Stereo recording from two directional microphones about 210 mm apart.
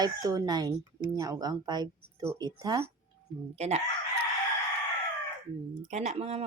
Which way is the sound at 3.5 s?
30° right (ahead or behind).